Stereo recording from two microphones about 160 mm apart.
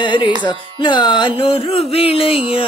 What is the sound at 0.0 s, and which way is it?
Music, 30° left (ahead or behind).